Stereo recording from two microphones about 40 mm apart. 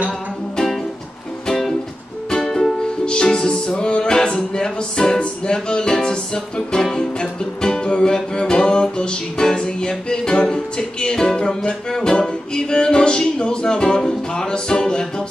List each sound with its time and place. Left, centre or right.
2.4 s music: centre